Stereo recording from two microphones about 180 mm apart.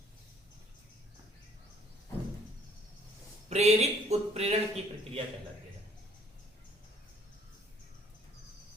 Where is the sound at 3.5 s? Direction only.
35° right (ahead or behind).